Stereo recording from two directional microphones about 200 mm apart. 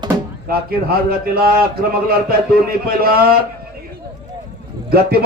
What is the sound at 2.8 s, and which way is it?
Speech, 50° right (ahead or behind).